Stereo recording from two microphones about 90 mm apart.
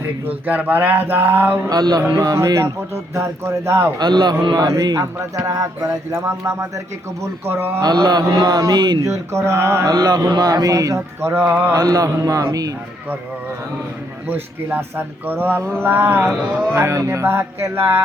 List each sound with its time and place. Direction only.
0.3 s speech: 20° right (ahead or behind)
1.7 s a man's voice: 45° right (ahead or behind); by 3.9 s 25° right (ahead or behind)
3.9 s a man's voice: 50° right (ahead or behind); by 7.8 s 25° right (ahead or behind)
8.0 s a man's voice: 45° right (ahead or behind)
9.0 s speech: 30° right (ahead or behind)
9.9 s speech: 45° right (ahead or behind); by 11.7 s 20° right (ahead or behind)
11.7 s speech: 40° right (ahead or behind)
14.3 s speech: 20° right (ahead or behind)
16.7 s speech: 30° right (ahead or behind)